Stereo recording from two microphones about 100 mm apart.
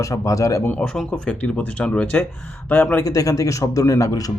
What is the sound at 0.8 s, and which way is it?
Speech, 5° left (ahead or behind).